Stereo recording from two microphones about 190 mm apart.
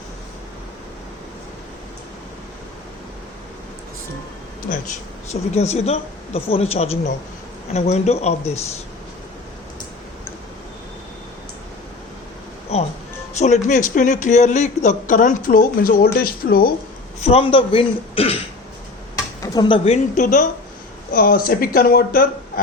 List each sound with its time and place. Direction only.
4.7 s a man's voice: 40° left (ahead or behind)
12.7 s a man's voice: 35° left (ahead or behind); by 16.7 s 50° left (ahead or behind)
17.2 s speech: 30° left (ahead or behind)
19.4 s a man's voice: 20° left (ahead or behind); by 22.6 s 50° left (ahead or behind)